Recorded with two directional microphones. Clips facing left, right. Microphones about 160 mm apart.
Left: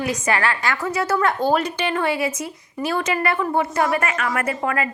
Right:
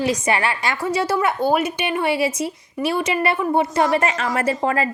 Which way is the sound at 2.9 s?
25° right (ahead or behind).